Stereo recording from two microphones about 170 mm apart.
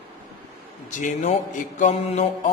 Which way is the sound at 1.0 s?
50° left (ahead or behind).